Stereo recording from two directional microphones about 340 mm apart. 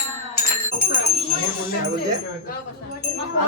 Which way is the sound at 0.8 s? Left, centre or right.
Left.